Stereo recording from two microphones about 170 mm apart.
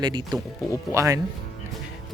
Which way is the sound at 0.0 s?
25° right (ahead or behind).